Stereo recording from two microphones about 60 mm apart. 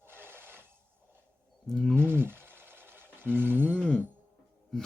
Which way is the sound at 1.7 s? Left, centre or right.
Centre.